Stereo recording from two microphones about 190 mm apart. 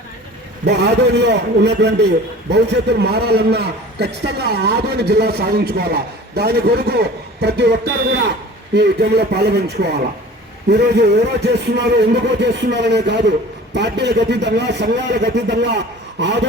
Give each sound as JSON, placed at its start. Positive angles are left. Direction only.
{"t": 0.6, "sound": "a man's voice", "side_deg": -60}